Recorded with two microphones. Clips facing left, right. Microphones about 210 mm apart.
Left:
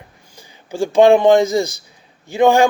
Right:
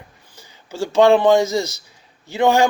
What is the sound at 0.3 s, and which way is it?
A man's voice, 15° left (ahead or behind).